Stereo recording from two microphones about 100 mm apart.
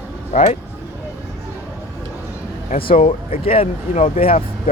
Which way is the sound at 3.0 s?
85° left.